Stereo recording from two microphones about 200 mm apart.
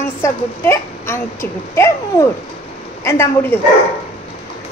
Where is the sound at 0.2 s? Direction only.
10° left (ahead or behind).